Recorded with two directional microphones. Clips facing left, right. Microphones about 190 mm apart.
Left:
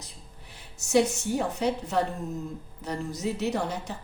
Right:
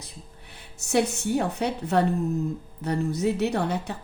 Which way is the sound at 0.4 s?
60° right (ahead or behind).